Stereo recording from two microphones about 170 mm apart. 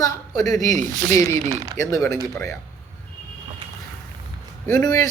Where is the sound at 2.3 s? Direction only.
20° left (ahead or behind).